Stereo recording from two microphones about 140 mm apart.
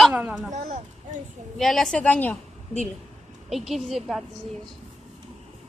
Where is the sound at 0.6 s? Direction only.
55° right (ahead or behind).